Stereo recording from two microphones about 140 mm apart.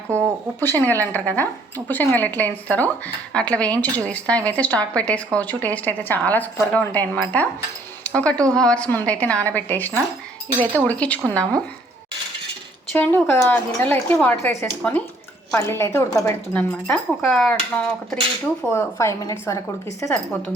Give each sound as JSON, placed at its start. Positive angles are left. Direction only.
{"t": 0.1, "sound": "speech", "side_deg": 10}
{"t": 12.9, "sound": "speech", "side_deg": 10}
{"t": 15.5, "sound": "a woman's voice", "side_deg": 20}
{"t": 16.5, "sound": "speech", "side_deg": 10}
{"t": 18.7, "sound": "a woman's voice", "side_deg": 20}